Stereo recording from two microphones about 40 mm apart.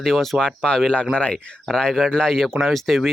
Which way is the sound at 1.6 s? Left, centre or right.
Centre.